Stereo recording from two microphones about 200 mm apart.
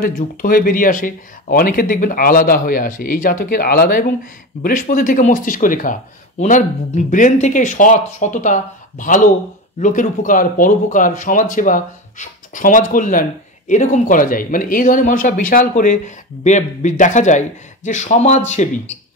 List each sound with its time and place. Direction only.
0.0 s speech: 45° left (ahead or behind)
7.1 s speech: 40° left (ahead or behind)